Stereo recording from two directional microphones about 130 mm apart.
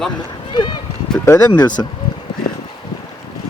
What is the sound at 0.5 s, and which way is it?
Speech, 35° left (ahead or behind).